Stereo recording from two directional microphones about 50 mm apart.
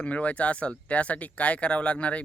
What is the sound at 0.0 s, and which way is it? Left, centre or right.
Speech, left.